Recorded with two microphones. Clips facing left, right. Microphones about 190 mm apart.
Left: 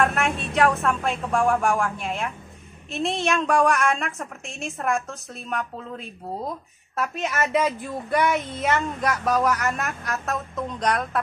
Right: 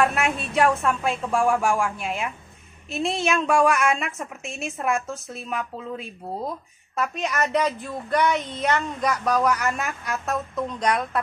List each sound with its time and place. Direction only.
0.0 s a woman's voice: centre (ahead or behind)